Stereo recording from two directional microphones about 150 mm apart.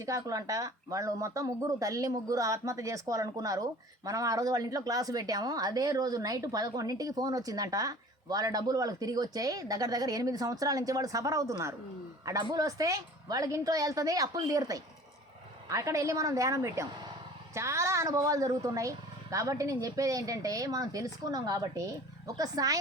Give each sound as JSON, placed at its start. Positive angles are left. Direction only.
{"t": 0.0, "sound": "speech", "side_deg": -20}